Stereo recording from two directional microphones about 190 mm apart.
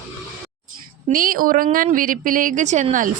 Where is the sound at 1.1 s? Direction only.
45° right (ahead or behind).